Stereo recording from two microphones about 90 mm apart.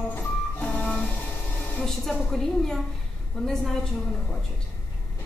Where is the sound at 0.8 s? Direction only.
Centre (ahead or behind).